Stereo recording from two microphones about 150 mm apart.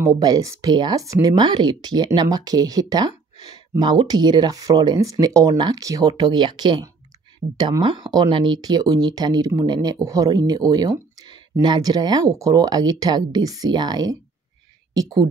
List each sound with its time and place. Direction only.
0.0 s speech: 25° right (ahead or behind)